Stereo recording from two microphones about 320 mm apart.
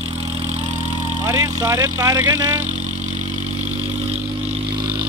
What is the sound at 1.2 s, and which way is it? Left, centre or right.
Speech, centre.